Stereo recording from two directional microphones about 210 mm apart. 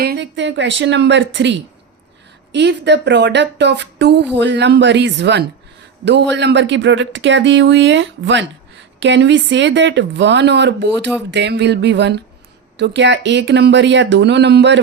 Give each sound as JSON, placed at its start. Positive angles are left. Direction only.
{"t": 0.0, "sound": "speech", "side_deg": -55}